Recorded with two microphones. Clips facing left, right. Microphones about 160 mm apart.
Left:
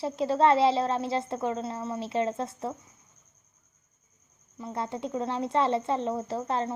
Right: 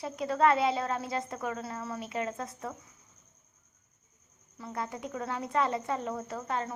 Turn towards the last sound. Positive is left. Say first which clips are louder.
# left 5 dB
turn(degrees=30)  # may be behind; listen again after turning